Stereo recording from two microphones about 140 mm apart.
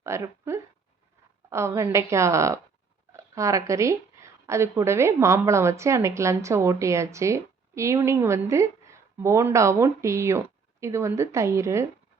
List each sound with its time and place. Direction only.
0.0 s speech: 20° right (ahead or behind)